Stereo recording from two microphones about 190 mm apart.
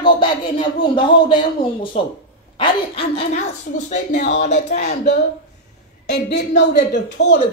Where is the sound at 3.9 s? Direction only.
40° left (ahead or behind).